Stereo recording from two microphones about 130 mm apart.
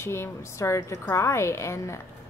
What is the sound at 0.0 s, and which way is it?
A woman's voice, 20° left (ahead or behind).